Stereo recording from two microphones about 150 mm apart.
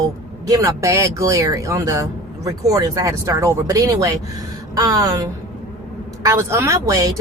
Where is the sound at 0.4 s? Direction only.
20° right (ahead or behind).